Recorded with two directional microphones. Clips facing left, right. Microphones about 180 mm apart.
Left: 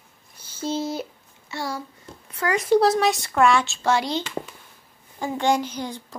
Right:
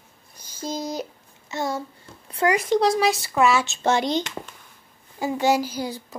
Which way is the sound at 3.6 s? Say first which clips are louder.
Right 1 dB; 20° right (ahead or behind).